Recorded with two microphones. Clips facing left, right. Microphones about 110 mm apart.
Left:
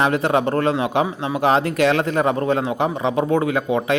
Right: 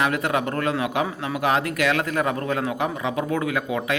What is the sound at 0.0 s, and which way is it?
A man's voice, 30° left (ahead or behind).